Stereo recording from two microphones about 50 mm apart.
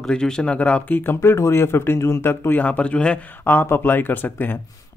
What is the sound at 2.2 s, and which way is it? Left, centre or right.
Speech, left.